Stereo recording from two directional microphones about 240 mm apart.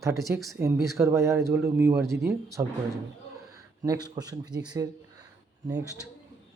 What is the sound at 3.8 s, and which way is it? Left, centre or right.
Speech, centre.